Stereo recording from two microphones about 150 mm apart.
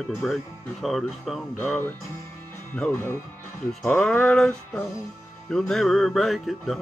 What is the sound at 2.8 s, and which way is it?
Speech, 15° left (ahead or behind).